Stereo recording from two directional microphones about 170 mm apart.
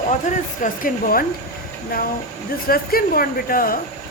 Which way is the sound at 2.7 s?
60° left (ahead or behind).